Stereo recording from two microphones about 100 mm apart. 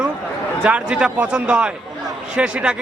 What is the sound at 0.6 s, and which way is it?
Speech, 10° right (ahead or behind).